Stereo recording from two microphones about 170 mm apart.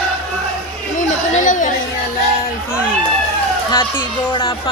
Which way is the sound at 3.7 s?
30° left (ahead or behind).